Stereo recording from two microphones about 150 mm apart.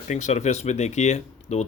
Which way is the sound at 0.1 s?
50° left (ahead or behind).